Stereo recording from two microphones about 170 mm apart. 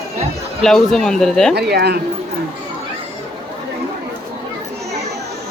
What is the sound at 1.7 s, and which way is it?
Speech, 70° right (ahead or behind).